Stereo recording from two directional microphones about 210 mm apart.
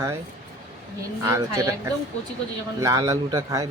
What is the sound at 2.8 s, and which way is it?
Speech, 15° right (ahead or behind).